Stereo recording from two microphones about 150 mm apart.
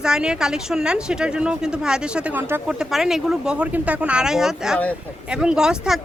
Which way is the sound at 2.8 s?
Centre (ahead or behind).